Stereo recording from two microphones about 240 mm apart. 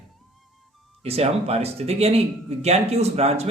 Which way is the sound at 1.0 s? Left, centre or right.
Right.